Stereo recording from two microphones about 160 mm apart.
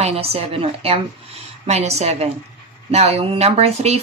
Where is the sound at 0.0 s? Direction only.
40° right (ahead or behind).